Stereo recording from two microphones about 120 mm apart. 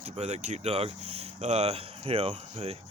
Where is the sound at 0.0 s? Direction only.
65° right (ahead or behind).